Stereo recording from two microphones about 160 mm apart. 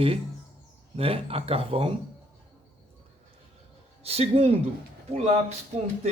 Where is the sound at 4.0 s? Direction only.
40° right (ahead or behind).